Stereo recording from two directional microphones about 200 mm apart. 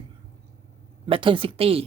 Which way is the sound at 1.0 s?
25° right (ahead or behind).